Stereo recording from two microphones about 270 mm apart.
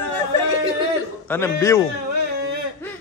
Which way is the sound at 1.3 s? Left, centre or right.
Centre.